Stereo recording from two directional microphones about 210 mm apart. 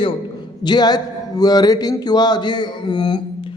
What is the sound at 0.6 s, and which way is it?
A man's voice, 20° left (ahead or behind).